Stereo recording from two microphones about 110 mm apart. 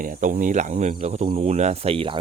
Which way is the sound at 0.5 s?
90° right.